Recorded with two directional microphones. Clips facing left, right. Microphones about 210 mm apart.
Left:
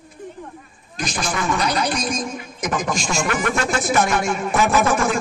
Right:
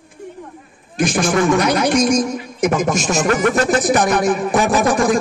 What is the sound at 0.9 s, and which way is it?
Speech, 50° right (ahead or behind).